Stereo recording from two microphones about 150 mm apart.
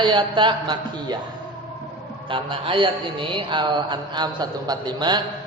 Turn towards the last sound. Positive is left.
turn(degrees=-30)  # may be behind; listen again after turning